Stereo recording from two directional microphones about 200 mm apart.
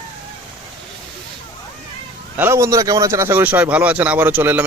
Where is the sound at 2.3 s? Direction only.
10° right (ahead or behind).